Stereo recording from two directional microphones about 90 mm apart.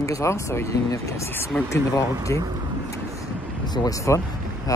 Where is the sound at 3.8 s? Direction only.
35° left (ahead or behind).